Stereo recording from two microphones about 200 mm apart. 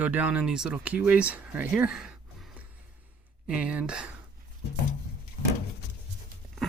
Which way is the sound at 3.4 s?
5° right (ahead or behind).